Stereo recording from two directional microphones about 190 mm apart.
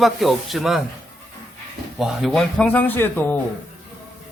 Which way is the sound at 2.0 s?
Centre (ahead or behind).